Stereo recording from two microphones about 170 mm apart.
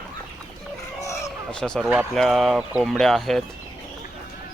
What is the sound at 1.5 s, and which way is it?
Speech, 5° left (ahead or behind).